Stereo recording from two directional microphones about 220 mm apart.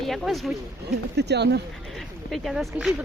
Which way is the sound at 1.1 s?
50° right (ahead or behind).